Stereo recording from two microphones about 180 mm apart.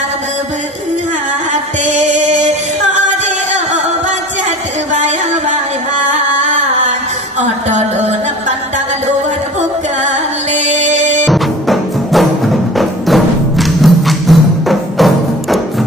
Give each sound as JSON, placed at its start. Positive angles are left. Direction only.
{"t": 1.5, "sound": "music", "side_deg": -40}
{"t": 10.0, "sound": "music", "side_deg": -40}
{"t": 11.2, "sound": "music", "side_deg": 0}